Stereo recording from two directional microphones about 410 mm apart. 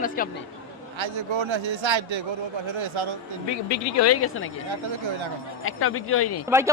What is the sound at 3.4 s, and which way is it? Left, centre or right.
Speech, left.